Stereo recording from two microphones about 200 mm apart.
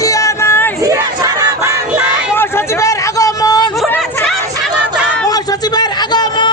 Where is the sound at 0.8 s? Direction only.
15° right (ahead or behind).